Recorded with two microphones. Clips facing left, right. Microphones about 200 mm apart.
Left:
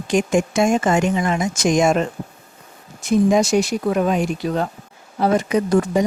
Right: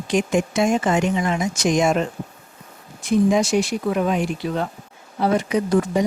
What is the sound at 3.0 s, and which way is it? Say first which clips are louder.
Speech: left 2 dB; 45° left (ahead or behind).